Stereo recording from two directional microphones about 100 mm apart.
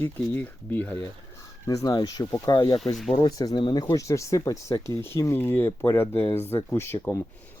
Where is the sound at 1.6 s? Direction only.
35° left (ahead or behind).